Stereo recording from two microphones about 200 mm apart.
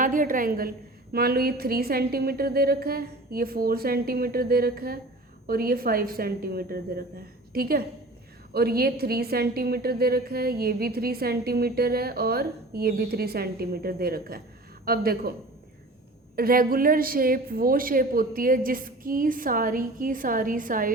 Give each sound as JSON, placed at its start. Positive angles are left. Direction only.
{"t": 0.0, "sound": "a woman's voice", "side_deg": -40}
{"t": 16.3, "sound": "a woman's voice", "side_deg": -50}